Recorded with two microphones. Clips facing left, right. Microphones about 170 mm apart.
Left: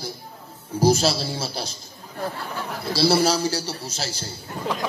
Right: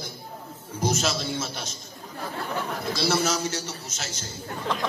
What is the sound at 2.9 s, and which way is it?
A man's voice, 35° left (ahead or behind).